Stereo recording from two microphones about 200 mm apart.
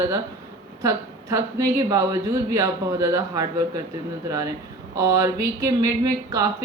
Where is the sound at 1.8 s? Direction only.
15° right (ahead or behind).